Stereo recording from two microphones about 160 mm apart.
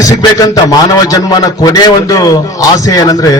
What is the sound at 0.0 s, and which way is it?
A man's voice, 25° left (ahead or behind).